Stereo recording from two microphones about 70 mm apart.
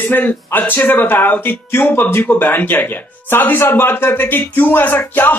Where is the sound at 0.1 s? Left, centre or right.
Left.